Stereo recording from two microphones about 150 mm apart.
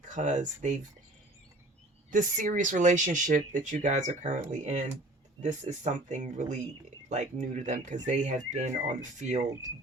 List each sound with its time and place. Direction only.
0.1 s speech: 55° right (ahead or behind)
2.0 s speech: 60° right (ahead or behind)